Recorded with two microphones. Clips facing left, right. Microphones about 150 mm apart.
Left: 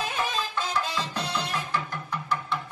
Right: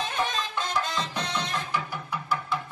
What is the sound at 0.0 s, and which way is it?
Music, 5° left (ahead or behind).